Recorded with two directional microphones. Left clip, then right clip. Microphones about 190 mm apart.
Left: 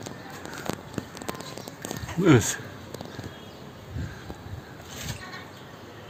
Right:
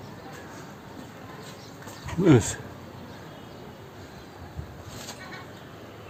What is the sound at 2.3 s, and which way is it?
Speech, 5° right (ahead or behind).